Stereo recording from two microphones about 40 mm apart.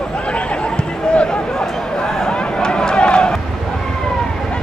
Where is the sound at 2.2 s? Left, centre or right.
Centre.